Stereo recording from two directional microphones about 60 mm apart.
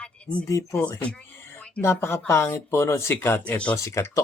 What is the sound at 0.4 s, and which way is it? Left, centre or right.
Speech, left.